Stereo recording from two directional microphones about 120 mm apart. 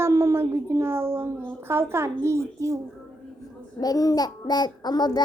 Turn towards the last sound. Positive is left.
turn(degrees=35)  # may be behind; listen again after turning